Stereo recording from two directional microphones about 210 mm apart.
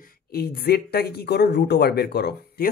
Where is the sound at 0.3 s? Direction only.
50° left (ahead or behind).